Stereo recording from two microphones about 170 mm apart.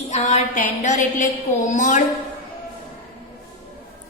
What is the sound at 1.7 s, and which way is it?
Speech, 45° left (ahead or behind).